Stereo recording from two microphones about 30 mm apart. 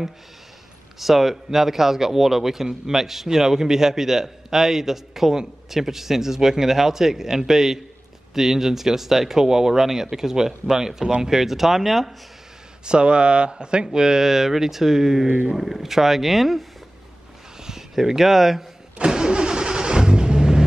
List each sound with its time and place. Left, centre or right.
0.9 s speech: centre
12.8 s speech: right
13.9 s speech: right; by 16.6 s centre
17.6 s speech: centre
19.0 s vehicle: right